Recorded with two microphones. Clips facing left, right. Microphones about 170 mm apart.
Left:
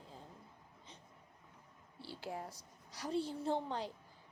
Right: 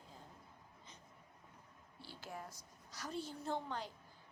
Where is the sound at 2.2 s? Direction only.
30° left (ahead or behind).